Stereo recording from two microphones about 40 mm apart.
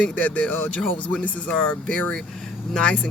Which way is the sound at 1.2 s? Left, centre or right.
Left.